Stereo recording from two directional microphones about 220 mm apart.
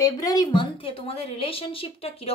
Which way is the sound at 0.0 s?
15° left (ahead or behind).